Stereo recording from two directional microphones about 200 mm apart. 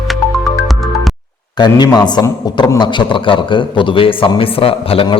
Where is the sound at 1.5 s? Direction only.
20° left (ahead or behind).